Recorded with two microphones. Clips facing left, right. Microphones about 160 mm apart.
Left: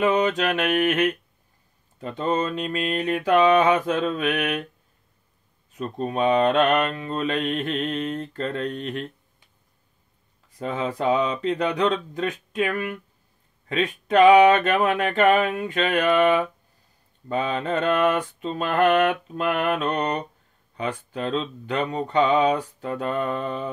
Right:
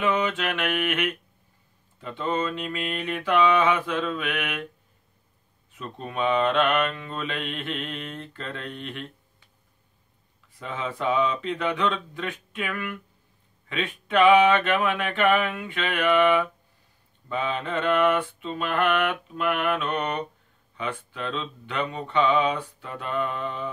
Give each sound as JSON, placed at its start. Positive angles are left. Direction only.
{"t": 0.0, "sound": "mantra", "side_deg": 40}
{"t": 5.7, "sound": "mantra", "side_deg": 40}
{"t": 10.6, "sound": "mantra", "side_deg": 40}